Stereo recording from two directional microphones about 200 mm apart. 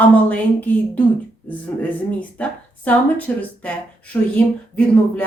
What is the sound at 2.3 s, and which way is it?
A woman's voice, 5° left (ahead or behind).